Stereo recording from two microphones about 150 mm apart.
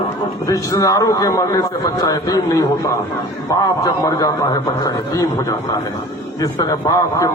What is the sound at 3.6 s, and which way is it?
Speech, 25° left (ahead or behind).